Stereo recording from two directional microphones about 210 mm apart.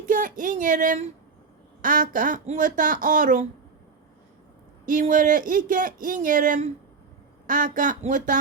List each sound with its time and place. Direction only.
0.0 s speech: 40° right (ahead or behind)
4.9 s speech: 40° right (ahead or behind)